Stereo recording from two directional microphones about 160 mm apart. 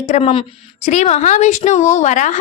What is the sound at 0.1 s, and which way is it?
A woman's voice, 40° left (ahead or behind).